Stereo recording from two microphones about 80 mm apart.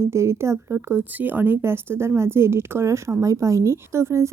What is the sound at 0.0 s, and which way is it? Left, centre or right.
Speech, right.